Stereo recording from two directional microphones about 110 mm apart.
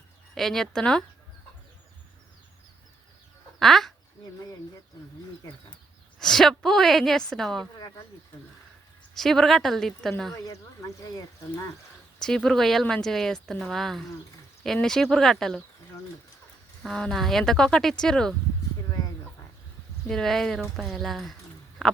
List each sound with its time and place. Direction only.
0.3 s speech: 5° left (ahead or behind)
3.6 s speech: centre (ahead or behind)
6.1 s speech: 5° left (ahead or behind)
9.1 s speech: 5° left (ahead or behind)
10.3 s speech: 30° left (ahead or behind)
12.2 s speech: 5° left (ahead or behind)
16.8 s speech: 5° left (ahead or behind)
20.1 s speech: 5° left (ahead or behind)
21.8 s a sound: 5° left (ahead or behind)